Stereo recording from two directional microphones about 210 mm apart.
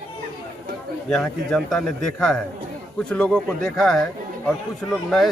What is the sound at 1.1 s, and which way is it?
Speech, 5° left (ahead or behind).